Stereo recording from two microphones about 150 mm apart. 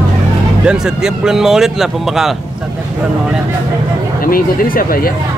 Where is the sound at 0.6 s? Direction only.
5° right (ahead or behind).